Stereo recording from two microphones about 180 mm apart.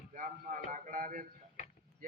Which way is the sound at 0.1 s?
45° right (ahead or behind).